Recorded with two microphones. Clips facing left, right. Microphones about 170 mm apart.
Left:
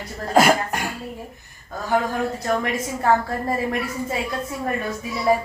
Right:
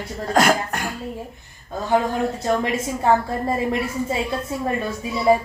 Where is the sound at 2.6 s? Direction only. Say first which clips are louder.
Right 2 dB; 20° right (ahead or behind).